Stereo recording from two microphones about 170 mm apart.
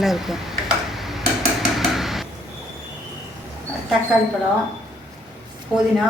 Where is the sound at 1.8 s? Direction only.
Centre (ahead or behind).